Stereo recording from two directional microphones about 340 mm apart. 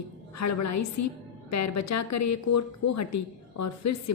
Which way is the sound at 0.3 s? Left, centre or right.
Left.